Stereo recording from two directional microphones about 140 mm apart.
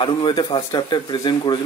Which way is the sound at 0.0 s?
35° left (ahead or behind).